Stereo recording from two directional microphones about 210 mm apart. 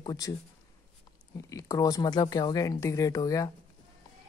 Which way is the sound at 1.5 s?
15° left (ahead or behind).